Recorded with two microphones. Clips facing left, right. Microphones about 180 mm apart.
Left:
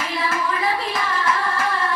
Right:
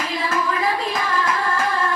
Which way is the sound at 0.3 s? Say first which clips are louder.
Right 3 dB; 45° right (ahead or behind).